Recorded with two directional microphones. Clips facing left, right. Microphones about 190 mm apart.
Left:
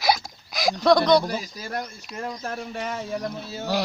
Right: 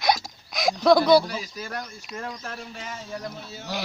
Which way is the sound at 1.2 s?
45° left (ahead or behind).